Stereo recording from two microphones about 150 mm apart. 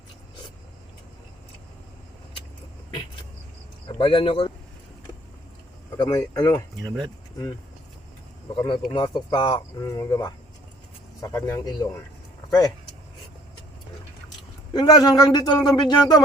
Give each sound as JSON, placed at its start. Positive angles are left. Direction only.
{"t": 3.8, "sound": "speech", "side_deg": 35}
{"t": 6.0, "sound": "a man's voice", "side_deg": 25}
{"t": 6.8, "sound": "speech", "side_deg": 5}
{"t": 8.5, "sound": "a man's voice", "side_deg": 30}
{"t": 14.7, "sound": "a man's voice", "side_deg": 30}